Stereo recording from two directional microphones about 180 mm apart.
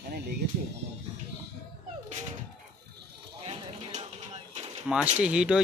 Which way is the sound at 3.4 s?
40° right (ahead or behind).